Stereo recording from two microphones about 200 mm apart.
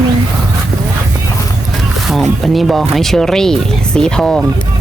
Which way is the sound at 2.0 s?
Centre (ahead or behind).